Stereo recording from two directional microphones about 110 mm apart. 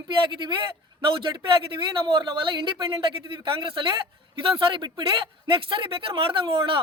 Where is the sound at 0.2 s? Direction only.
45° right (ahead or behind).